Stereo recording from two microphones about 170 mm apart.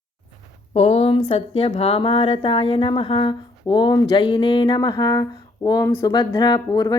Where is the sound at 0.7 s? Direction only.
40° left (ahead or behind).